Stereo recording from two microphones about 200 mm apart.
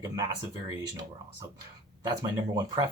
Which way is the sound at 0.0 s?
20° right (ahead or behind).